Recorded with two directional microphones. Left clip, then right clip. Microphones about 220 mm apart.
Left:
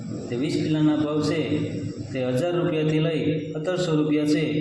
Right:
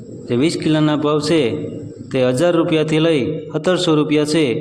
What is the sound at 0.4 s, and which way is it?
A man's voice, 50° right (ahead or behind).